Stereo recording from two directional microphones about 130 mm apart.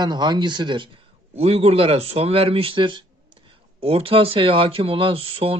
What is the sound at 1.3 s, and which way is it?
Speech, 50° right (ahead or behind).